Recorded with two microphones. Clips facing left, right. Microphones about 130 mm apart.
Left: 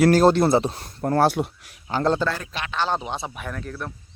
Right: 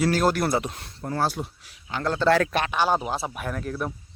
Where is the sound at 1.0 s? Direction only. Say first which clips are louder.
Left 7 dB; 60° left (ahead or behind).